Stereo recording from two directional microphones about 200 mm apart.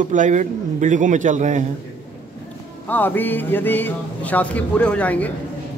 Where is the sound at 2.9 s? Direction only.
10° left (ahead or behind).